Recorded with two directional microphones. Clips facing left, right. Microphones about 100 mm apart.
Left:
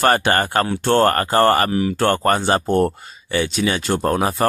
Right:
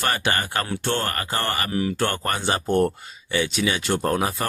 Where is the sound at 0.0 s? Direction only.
45° left (ahead or behind).